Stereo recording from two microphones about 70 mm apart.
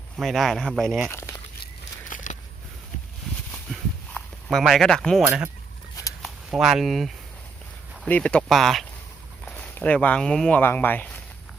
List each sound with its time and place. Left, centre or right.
0.2 s speech: centre
1.1 s speech: left
4.4 s speech: centre
6.5 s speech: centre
8.0 s speech: centre
8.4 s speech: centre
9.5 s speech: centre
10.6 s speech: left